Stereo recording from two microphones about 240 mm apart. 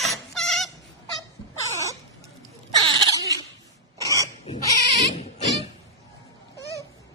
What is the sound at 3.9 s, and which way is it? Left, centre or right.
Pig, centre.